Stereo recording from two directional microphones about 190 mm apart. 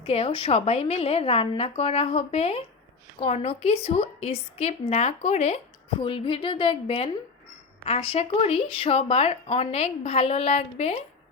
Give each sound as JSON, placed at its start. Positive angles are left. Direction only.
{"t": 0.0, "sound": "a woman's voice", "side_deg": 30}